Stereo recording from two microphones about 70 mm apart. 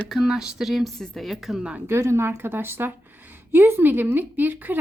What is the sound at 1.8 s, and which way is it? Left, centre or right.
A woman's voice, right.